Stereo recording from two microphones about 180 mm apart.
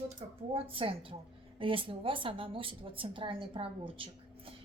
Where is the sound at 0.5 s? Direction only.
30° right (ahead or behind).